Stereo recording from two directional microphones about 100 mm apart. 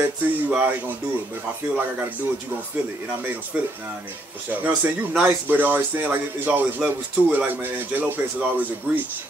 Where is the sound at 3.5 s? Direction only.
15° right (ahead or behind).